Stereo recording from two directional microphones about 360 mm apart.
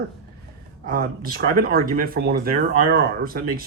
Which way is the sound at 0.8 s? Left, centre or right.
Right.